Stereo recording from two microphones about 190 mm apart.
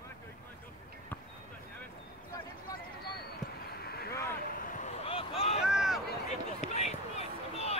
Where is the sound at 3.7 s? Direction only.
55° left (ahead or behind); by 5.6 s 30° left (ahead or behind).